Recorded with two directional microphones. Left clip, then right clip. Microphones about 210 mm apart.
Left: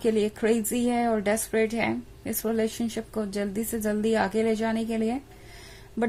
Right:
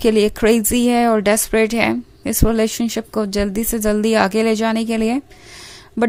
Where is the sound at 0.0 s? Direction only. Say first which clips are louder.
Right 10 dB; 40° right (ahead or behind).